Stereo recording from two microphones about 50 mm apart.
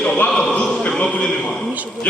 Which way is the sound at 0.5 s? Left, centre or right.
Centre.